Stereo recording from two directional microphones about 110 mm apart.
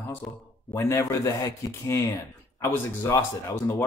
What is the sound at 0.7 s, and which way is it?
Speech, 25° left (ahead or behind).